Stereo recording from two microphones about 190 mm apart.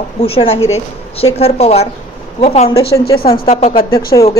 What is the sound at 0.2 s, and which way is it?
A woman's voice, 30° left (ahead or behind).